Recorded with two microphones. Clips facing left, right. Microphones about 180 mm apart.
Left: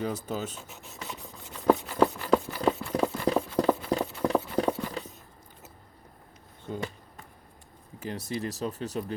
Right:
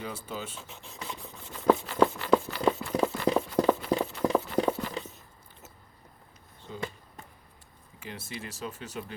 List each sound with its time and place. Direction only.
0.0 s speech: 40° left (ahead or behind)
0.7 s writing: 5° left (ahead or behind)
1.9 s a sound: 10° left (ahead or behind)
2.8 s clip-clop: 5° right (ahead or behind)
6.7 s basketball bounce: 50° left (ahead or behind)
7.9 s speech: 40° left (ahead or behind)